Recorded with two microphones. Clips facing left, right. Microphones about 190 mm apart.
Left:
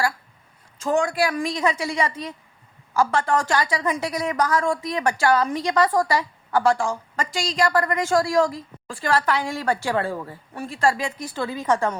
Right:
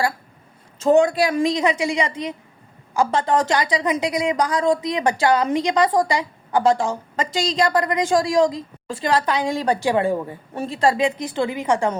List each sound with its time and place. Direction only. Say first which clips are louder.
0.8 s a woman's voice: right 6 dB; 25° right (ahead or behind)